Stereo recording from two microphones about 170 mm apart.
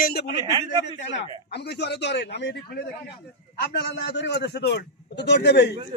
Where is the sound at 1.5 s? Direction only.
75° left (ahead or behind).